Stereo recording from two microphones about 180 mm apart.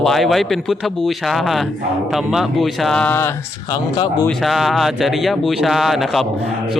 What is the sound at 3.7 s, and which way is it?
Speech, 25° left (ahead or behind).